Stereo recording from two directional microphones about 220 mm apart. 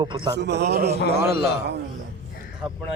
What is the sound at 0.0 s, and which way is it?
Speech, 20° right (ahead or behind).